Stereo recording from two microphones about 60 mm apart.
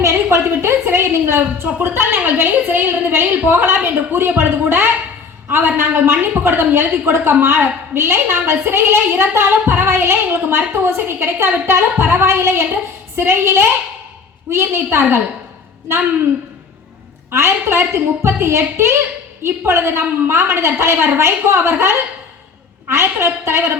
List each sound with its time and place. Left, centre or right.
0.0 s a woman's voice: right
17.3 s a woman's voice: right